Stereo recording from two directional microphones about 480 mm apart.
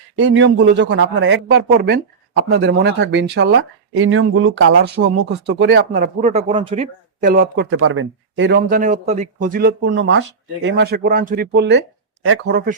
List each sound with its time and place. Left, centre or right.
0.2 s a man's voice: right